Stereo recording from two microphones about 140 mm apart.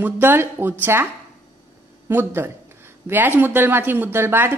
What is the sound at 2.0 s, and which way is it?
A woman's voice, 15° right (ahead or behind).